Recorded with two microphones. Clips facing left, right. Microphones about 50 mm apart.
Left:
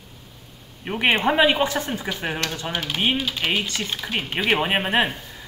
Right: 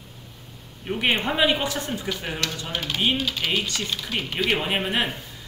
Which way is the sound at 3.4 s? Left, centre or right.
Left.